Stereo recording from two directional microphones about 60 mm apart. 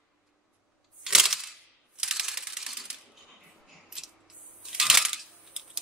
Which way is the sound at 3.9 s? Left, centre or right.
Centre.